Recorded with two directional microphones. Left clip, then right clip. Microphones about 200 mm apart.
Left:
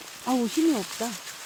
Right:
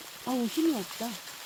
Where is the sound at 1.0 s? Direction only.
60° left (ahead or behind).